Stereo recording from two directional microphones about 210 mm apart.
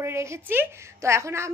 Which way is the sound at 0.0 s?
15° right (ahead or behind).